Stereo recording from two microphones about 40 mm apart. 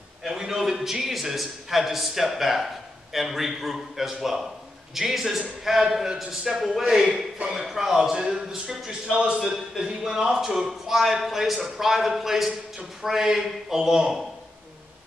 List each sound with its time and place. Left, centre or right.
0.3 s a sound: centre
0.8 s a man's voice: centre
8.2 s a man's voice: centre